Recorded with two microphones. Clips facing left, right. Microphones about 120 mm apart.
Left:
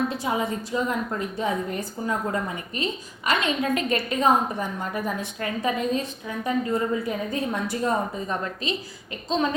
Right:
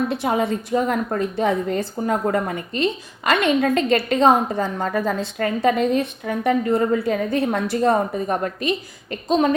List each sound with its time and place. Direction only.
0.1 s a woman's voice: 70° right (ahead or behind)